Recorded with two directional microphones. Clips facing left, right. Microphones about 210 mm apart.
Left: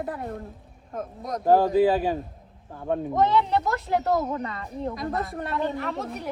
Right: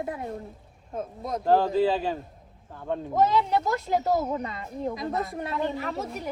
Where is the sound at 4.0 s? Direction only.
20° right (ahead or behind).